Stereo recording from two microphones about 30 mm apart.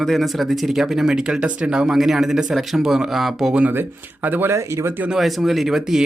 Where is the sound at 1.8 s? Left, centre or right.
Centre.